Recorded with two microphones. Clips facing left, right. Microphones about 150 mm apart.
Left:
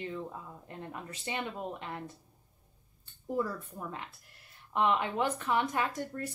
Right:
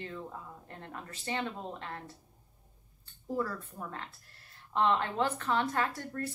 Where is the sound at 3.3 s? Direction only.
15° left (ahead or behind).